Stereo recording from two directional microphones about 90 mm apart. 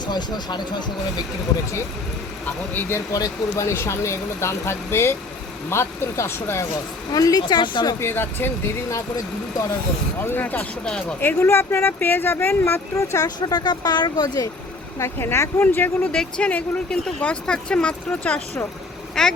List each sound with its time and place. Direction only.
0.0 s speech: 55° left (ahead or behind)
3.1 s speech: 40° left (ahead or behind)
7.1 s speech: 45° left (ahead or behind)
7.4 s speech: 60° left (ahead or behind)
7.9 s speech: 25° left (ahead or behind)
8.9 s speech: 40° left (ahead or behind)
10.2 s speech: 20° left (ahead or behind)
10.8 s speech: 5° left (ahead or behind)
11.2 s speech: 25° left (ahead or behind)
13.2 s speech: 50° left (ahead or behind)
14.9 s speech: 30° left (ahead or behind)
19.2 s speech: 5° left (ahead or behind)